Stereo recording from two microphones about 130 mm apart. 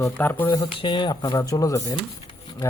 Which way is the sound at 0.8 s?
35° left (ahead or behind).